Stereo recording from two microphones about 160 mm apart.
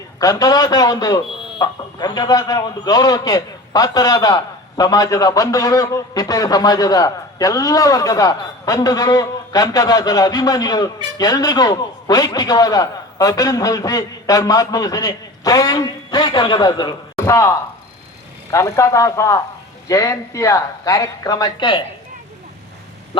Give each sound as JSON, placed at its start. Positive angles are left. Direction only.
{"t": 0.2, "sound": "a man's voice", "side_deg": 25}